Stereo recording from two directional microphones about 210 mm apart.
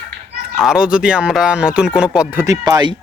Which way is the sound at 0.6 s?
5° right (ahead or behind).